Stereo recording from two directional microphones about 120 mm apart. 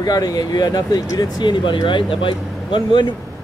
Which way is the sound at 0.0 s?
35° left (ahead or behind).